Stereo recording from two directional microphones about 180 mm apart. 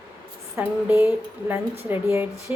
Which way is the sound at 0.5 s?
10° right (ahead or behind).